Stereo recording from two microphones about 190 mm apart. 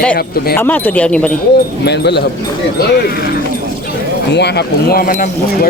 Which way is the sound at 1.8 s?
60° left (ahead or behind).